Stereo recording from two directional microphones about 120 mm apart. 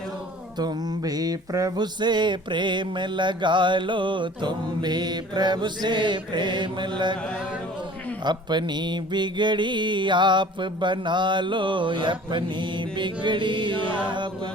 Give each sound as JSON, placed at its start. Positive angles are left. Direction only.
{"t": 0.6, "sound": "mantra", "side_deg": -30}
{"t": 8.2, "sound": "mantra", "side_deg": -40}